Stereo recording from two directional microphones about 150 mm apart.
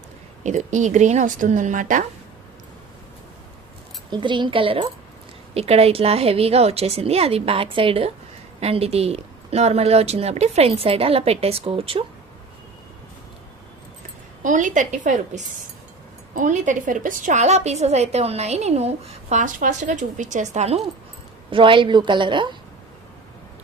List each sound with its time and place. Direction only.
0.4 s a woman's voice: 55° right (ahead or behind)
4.1 s a woman's voice: 30° right (ahead or behind)
14.4 s a woman's voice: 60° right (ahead or behind)
21.5 s a woman's voice: 35° right (ahead or behind)